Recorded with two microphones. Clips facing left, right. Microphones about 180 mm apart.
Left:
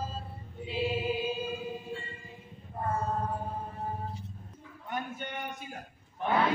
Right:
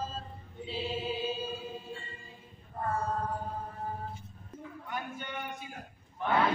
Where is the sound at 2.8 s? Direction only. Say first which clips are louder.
Left 1 dB; 25° left (ahead or behind).